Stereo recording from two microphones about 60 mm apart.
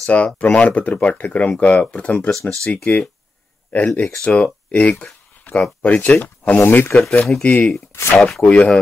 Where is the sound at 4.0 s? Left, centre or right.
Centre.